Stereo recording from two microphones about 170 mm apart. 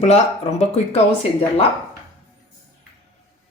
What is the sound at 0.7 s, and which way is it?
Speech, 35° left (ahead or behind).